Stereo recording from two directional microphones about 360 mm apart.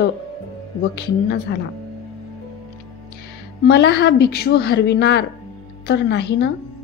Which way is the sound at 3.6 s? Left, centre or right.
Left.